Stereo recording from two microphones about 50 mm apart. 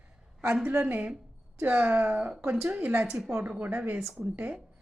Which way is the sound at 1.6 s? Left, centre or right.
Right.